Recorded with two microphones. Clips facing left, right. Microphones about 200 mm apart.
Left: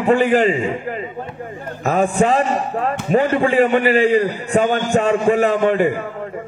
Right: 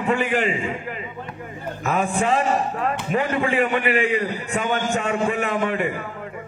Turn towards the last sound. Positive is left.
turn(degrees=35)  # may be behind; listen again after turning